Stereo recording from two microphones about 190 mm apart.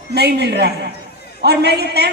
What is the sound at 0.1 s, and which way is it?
A woman's voice, 60° right (ahead or behind).